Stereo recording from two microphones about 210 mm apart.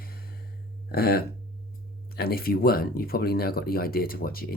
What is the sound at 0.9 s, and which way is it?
Speech, 45° left (ahead or behind).